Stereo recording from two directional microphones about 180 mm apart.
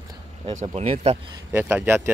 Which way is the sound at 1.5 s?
10° right (ahead or behind).